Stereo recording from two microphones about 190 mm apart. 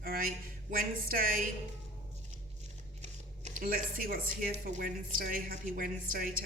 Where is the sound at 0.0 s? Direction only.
50° right (ahead or behind).